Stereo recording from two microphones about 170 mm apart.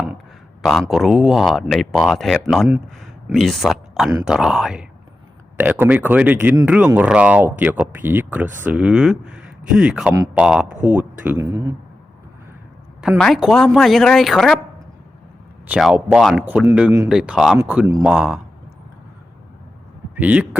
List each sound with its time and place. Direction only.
0.6 s speech: centre (ahead or behind)
11.3 s speech: 20° right (ahead or behind)
13.0 s speech: centre (ahead or behind)
15.6 s speech: 5° right (ahead or behind)
20.1 s speech: 10° right (ahead or behind)